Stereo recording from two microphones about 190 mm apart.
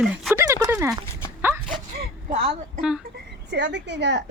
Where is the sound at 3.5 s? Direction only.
65° right (ahead or behind).